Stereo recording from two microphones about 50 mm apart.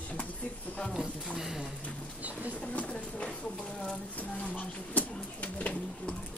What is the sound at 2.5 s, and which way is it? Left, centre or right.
Speech, left.